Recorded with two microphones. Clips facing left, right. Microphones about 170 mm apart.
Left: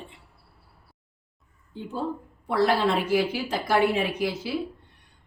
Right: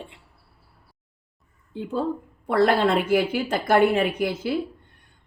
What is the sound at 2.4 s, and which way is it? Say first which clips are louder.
A woman's voice: right 3 dB; 55° right (ahead or behind).